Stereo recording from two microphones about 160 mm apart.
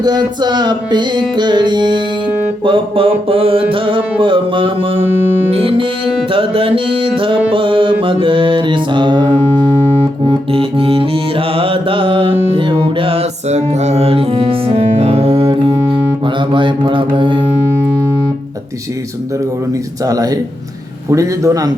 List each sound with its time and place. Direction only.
0.0 s music: 25° right (ahead or behind)
16.2 s mantra: 30° right (ahead or behind)
20.1 s music: 20° right (ahead or behind)